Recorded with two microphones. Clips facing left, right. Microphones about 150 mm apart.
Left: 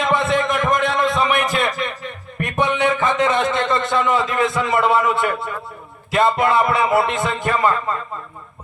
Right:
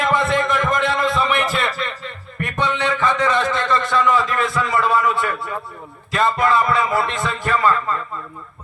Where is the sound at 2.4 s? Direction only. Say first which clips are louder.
Left 3 dB; 20° left (ahead or behind).